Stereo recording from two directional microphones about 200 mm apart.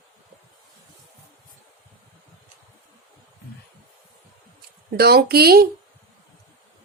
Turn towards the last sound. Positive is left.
turn(degrees=-50)  # may be behind; listen again after turning